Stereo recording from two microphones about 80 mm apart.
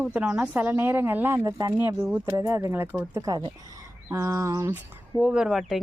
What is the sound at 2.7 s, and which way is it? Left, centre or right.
Speech, right.